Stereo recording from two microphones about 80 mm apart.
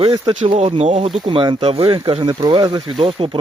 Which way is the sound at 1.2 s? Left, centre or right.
Right.